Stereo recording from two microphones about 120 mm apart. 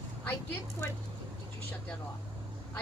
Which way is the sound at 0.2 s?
20° left (ahead or behind).